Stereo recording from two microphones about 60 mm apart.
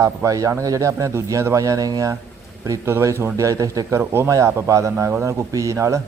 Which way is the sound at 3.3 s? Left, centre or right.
Right.